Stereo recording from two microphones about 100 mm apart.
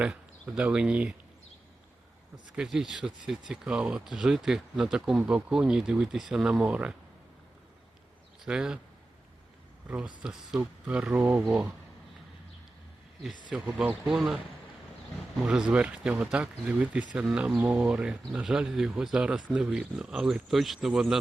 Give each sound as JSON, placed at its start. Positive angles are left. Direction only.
{"t": 0.0, "sound": "speech", "side_deg": -10}
{"t": 2.6, "sound": "speech", "side_deg": -5}
{"t": 8.4, "sound": "speech", "side_deg": -10}
{"t": 9.9, "sound": "speech", "side_deg": -10}
{"t": 13.5, "sound": "speech", "side_deg": -10}
{"t": 15.4, "sound": "speech", "side_deg": -10}